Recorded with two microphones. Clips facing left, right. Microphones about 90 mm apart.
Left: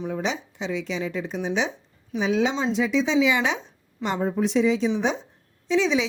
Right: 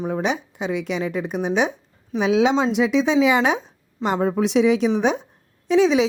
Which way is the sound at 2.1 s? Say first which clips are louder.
Right 5 dB; 65° right (ahead or behind).